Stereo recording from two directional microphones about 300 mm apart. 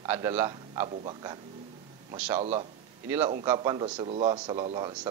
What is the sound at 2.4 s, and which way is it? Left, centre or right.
Speech, right.